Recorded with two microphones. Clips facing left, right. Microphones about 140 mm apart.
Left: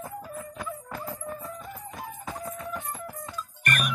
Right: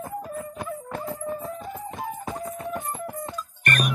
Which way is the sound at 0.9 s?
25° right (ahead or behind).